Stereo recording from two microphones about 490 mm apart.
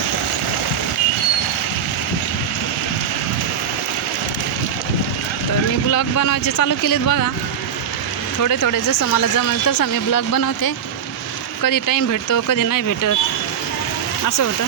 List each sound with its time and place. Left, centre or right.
5.9 s speech: left
8.4 s speech: left